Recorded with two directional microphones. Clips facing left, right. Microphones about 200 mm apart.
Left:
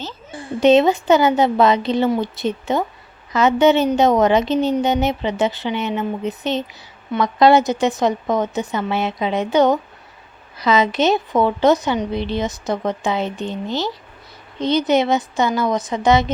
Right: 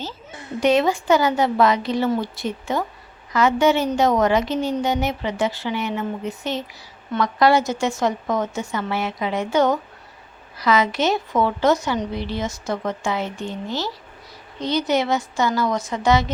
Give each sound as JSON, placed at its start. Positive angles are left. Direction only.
{"t": 0.3, "sound": "a woman's voice", "side_deg": 30}